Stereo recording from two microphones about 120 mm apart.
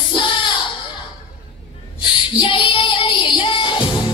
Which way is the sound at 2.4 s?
45° left (ahead or behind).